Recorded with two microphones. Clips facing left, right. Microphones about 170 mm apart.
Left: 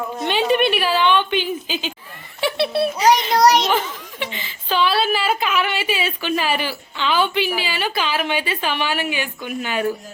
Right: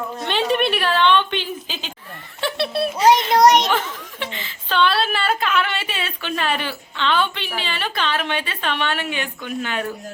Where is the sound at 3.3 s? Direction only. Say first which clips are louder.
Right 2 dB; 20° right (ahead or behind).